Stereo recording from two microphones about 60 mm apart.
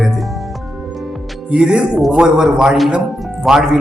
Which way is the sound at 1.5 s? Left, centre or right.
Centre.